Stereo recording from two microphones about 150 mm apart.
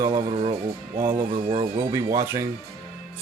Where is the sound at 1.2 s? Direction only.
40° right (ahead or behind).